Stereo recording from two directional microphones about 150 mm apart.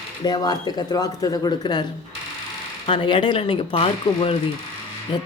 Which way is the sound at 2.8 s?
35° left (ahead or behind).